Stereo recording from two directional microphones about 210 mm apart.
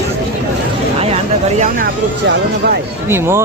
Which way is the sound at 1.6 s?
45° right (ahead or behind).